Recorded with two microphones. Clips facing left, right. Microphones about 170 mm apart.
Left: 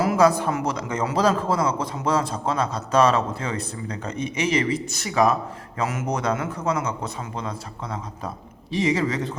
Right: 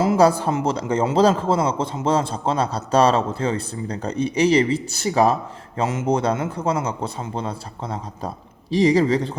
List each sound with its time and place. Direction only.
0.0 s a man's voice: 30° right (ahead or behind)